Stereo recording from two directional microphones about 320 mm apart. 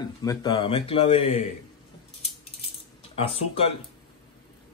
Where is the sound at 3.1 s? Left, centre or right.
Centre.